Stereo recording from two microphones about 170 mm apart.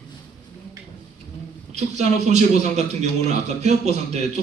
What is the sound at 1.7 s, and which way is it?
A man's voice, 40° right (ahead or behind).